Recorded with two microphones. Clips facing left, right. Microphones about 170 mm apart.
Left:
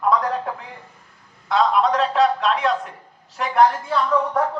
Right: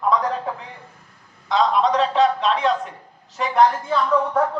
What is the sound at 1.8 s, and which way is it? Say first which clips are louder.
A man's voice: even; centre (ahead or behind).